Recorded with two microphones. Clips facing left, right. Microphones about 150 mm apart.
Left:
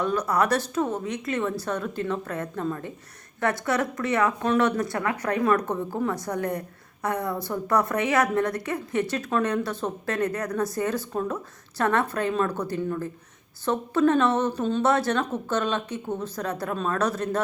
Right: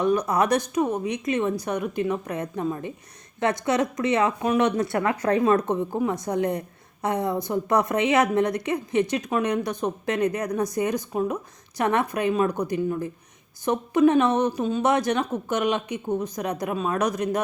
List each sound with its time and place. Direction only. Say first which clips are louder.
0.0 s speech: right 2 dB; 20° right (ahead or behind)